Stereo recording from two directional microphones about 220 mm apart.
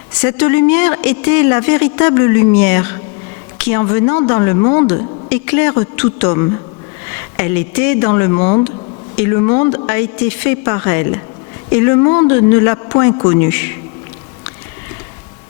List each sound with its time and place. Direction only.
0.3 s a woman's voice: 15° left (ahead or behind); by 8.6 s 30° left (ahead or behind)
9.1 s speech: 20° left (ahead or behind)